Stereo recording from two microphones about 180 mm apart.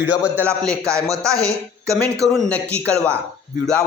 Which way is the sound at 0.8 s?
15° right (ahead or behind).